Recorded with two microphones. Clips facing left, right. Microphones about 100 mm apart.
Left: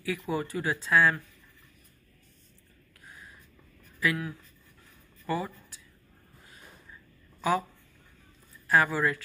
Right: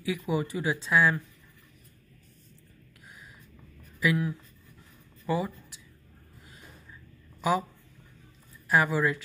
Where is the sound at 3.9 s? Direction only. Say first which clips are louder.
Right 3 dB; 15° right (ahead or behind).